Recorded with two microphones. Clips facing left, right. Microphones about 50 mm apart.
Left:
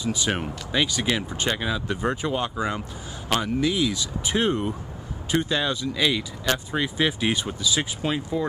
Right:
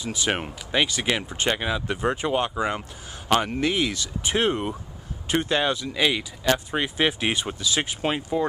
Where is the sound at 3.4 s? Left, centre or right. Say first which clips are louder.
Left 1 dB; right.